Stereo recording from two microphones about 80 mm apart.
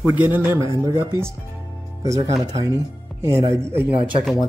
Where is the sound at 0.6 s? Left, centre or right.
Right.